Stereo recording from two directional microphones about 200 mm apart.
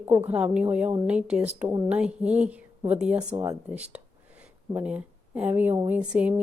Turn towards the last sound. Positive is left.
turn(degrees=-5)  # may be behind; listen again after turning